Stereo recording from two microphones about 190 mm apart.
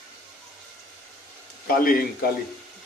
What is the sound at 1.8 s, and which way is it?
Speech, 50° left (ahead or behind).